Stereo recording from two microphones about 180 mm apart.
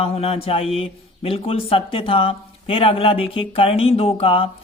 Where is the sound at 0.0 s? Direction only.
35° left (ahead or behind).